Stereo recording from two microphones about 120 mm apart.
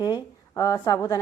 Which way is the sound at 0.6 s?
30° left (ahead or behind).